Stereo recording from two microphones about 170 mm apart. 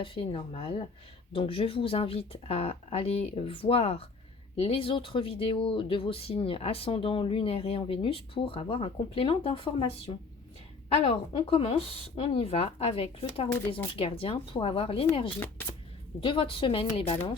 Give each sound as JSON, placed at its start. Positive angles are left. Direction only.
{"t": 0.0, "sound": "speech", "side_deg": 30}
{"t": 11.0, "sound": "speech", "side_deg": 35}
{"t": 15.6, "sound": "speech", "side_deg": 10}
{"t": 16.2, "sound": "speech", "side_deg": 30}